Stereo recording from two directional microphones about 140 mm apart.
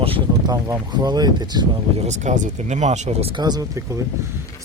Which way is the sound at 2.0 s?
55° right (ahead or behind).